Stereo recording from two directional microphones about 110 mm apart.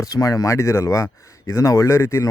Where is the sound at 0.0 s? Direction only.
35° left (ahead or behind).